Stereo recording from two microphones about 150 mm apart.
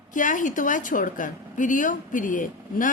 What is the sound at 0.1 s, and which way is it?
A woman's voice, 60° left (ahead or behind).